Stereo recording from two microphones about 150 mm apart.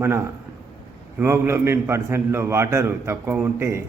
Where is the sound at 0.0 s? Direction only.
15° right (ahead or behind).